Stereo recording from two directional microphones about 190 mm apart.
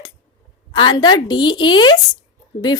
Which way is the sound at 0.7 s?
25° left (ahead or behind).